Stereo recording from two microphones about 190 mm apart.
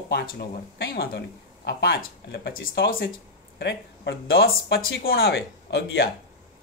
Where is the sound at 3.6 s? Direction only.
60° left (ahead or behind).